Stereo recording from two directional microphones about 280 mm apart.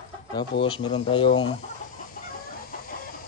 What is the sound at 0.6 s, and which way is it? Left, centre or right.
Speech, centre.